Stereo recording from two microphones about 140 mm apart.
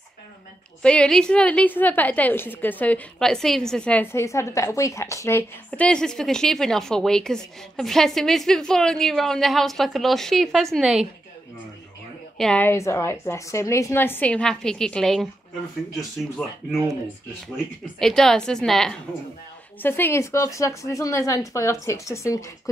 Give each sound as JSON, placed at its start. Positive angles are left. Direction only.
{"t": 0.8, "sound": "a woman's voice", "side_deg": 5}
{"t": 5.7, "sound": "a woman's voice", "side_deg": 5}
{"t": 12.4, "sound": "a woman's voice", "side_deg": 5}
{"t": 12.6, "sound": "a woman's voice", "side_deg": 20}
{"t": 16.4, "sound": "a woman's voice", "side_deg": 10}
{"t": 17.9, "sound": "a woman's voice", "side_deg": 0}
{"t": 19.8, "sound": "a woman's voice", "side_deg": 15}